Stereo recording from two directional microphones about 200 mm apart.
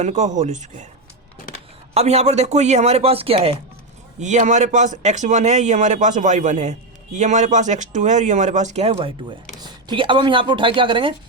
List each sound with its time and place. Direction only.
0.0 s speech: 35° right (ahead or behind)
1.9 s speech: 30° right (ahead or behind)